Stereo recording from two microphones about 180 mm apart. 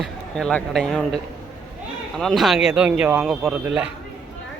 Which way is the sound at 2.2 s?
Centre (ahead or behind).